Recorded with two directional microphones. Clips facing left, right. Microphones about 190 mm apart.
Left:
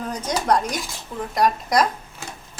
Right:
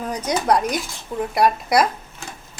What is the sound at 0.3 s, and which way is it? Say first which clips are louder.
Speech: right 2 dB; 10° right (ahead or behind).